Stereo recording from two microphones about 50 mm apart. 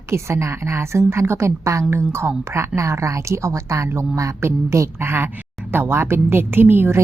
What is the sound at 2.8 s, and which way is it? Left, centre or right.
A woman's voice, right.